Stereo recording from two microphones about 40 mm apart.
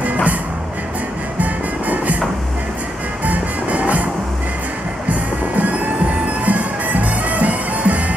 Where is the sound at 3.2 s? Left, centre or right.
Right.